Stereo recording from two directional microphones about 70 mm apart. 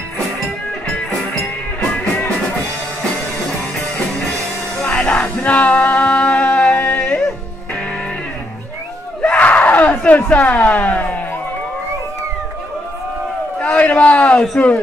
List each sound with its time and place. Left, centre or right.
4.9 s music: centre
9.2 s a sound: centre
13.6 s a man's voice: centre